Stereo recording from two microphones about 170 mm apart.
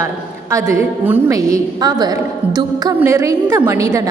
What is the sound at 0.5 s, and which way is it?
A woman's voice, 15° right (ahead or behind).